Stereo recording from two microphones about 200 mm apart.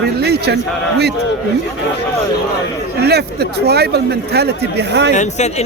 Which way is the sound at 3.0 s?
55° right (ahead or behind).